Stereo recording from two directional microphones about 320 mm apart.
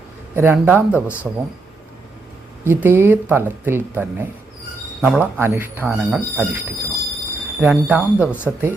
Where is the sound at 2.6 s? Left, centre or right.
Centre.